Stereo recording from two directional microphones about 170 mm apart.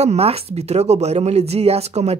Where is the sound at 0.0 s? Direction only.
40° right (ahead or behind).